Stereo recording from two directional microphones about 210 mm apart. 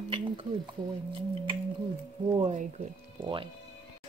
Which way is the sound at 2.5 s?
25° right (ahead or behind).